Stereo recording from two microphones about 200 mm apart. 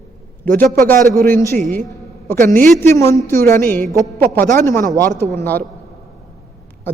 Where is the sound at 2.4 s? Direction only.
40° right (ahead or behind).